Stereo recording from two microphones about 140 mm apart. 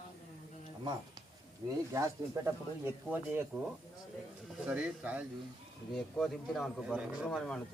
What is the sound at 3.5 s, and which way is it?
Speech, 5° left (ahead or behind).